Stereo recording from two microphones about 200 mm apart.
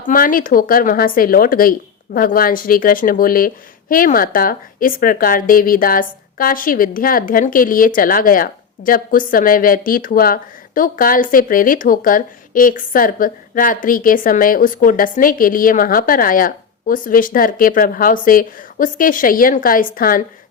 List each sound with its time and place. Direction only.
0.0 s speech: 45° left (ahead or behind)